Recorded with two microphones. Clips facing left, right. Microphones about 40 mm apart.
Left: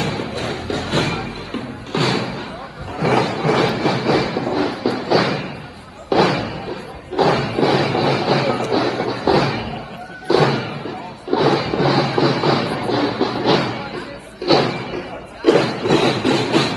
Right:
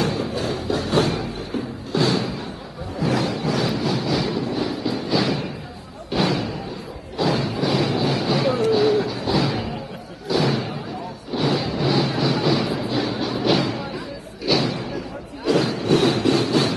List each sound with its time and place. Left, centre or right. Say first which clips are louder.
0.0 s music: even; left
3.0 s a sound: left 5 dB; left
6.1 s slam: left 6 dB; left
7.2 s music: left 6 dB; left
10.3 s slam: left 5 dB; left
11.5 s vehicle: left 4 dB; left
13.6 s music: left 2 dB; left
14.6 s a sound: left 4 dB; left